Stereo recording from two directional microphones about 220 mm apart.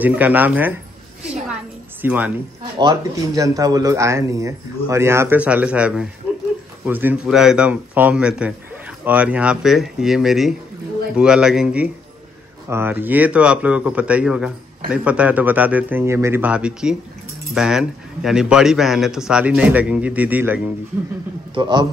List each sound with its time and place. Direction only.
0.0 s speech: 5° right (ahead or behind)
1.5 s a sound: 10° right (ahead or behind)
2.8 s a man's voice: 15° right (ahead or behind)
21.5 s a man's voice: 20° right (ahead or behind)